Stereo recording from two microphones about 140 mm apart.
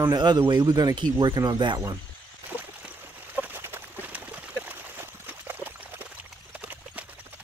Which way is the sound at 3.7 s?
15° right (ahead or behind).